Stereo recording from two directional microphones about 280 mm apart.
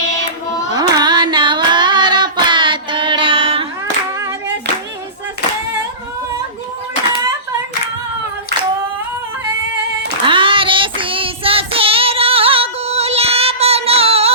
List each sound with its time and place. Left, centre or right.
0.7 s carnatic music: centre
4.2 s clapping: centre
10.2 s child singing: centre